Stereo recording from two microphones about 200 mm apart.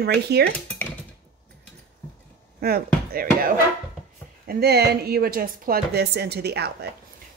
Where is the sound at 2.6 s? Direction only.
50° right (ahead or behind).